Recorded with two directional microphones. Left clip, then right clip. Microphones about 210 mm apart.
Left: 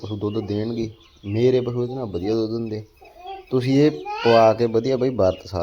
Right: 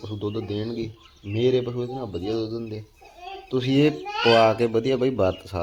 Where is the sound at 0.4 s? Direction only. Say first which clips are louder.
Left 4 dB; 20° left (ahead or behind).